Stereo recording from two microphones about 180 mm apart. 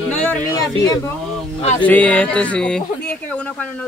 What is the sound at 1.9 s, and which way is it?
Speech, 5° left (ahead or behind).